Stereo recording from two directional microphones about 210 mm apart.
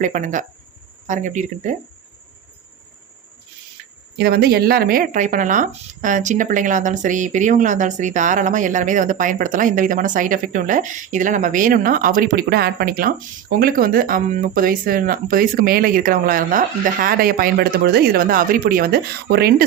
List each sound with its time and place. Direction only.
0.0 s speech: 40° right (ahead or behind)
4.2 s speech: 50° right (ahead or behind)